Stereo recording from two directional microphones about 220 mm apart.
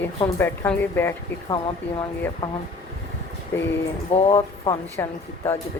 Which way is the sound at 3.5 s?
10° left (ahead or behind).